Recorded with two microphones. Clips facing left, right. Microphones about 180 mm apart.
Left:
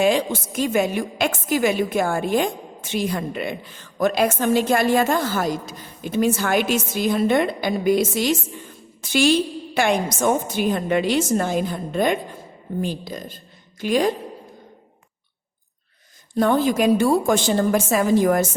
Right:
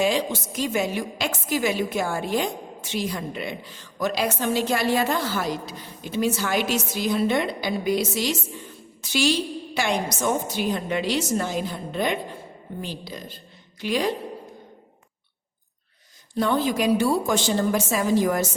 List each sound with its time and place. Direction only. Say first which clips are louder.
0.0 s a woman's voice: left 4 dB; 55° left (ahead or behind)
16.3 s a woman's voice: left 4 dB; 50° left (ahead or behind)